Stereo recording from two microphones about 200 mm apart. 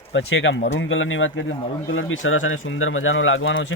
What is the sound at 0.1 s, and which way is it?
Speech, 70° left (ahead or behind).